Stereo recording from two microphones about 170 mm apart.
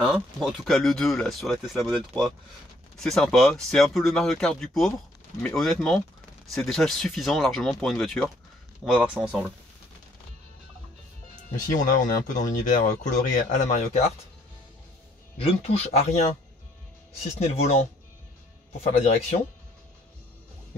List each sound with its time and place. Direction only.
0.0 s speech: centre (ahead or behind)
11.8 s speech: 50° left (ahead or behind)
15.4 s speech: 35° left (ahead or behind)
18.9 s speech: 40° left (ahead or behind)